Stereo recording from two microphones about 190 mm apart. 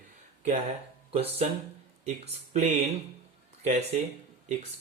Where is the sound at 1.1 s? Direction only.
30° right (ahead or behind).